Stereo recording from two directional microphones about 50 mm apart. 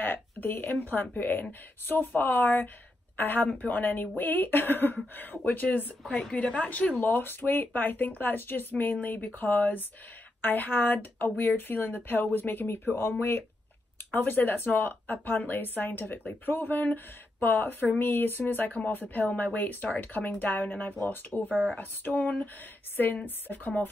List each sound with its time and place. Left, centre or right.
0.0 s a woman's voice: left
3.4 s speech: left
6.0 s a woman's voice: centre
6.6 s speech: left
7.0 s speech: left
12.6 s speech: left
14.1 s speech: left